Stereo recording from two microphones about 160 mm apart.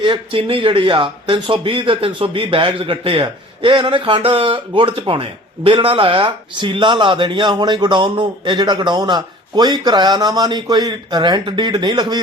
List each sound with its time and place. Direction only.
0.0 s speech: 35° right (ahead or behind)